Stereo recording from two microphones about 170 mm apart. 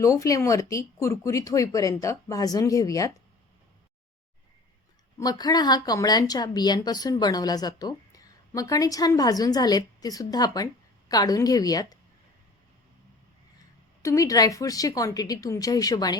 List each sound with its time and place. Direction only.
0.0 s a woman's voice: 20° left (ahead or behind)
5.1 s a woman's voice: 25° left (ahead or behind)
14.0 s a woman's voice: 20° left (ahead or behind)